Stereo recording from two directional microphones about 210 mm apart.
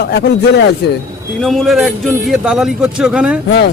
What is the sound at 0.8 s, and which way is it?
Speech, 55° left (ahead or behind).